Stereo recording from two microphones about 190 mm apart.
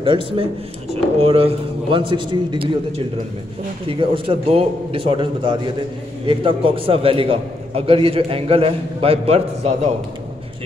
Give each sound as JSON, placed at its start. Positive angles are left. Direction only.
{"t": 0.0, "sound": "a man's voice", "side_deg": -25}
{"t": 3.9, "sound": "a man's voice", "side_deg": -30}